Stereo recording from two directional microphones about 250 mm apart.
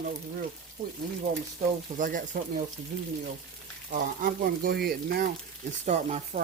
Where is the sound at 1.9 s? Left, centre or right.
Right.